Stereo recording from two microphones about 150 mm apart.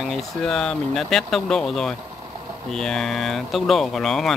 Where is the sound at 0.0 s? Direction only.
Centre (ahead or behind).